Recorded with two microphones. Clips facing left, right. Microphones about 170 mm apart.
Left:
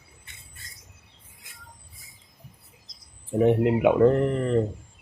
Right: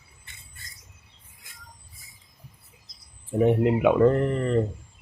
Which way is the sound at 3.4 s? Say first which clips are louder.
Left 1 dB; 15° left (ahead or behind).